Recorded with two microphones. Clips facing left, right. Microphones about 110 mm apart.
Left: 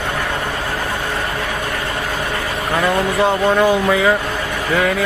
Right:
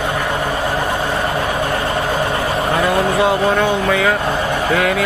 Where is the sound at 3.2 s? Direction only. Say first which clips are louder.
Left 3 dB; centre (ahead or behind).